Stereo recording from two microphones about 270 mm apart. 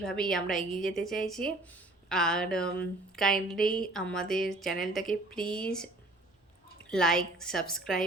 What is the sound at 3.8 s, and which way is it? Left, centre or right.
A woman's voice, centre.